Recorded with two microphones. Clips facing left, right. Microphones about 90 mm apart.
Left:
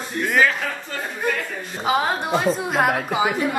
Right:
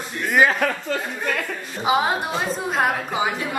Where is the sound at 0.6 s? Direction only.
60° right (ahead or behind).